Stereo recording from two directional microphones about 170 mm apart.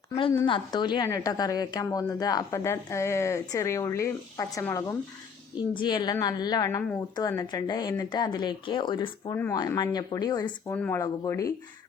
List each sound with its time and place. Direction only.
0.4 s a woman's voice: 25° left (ahead or behind)
10.8 s speech: 10° left (ahead or behind)
11.0 s a woman's voice: 20° left (ahead or behind)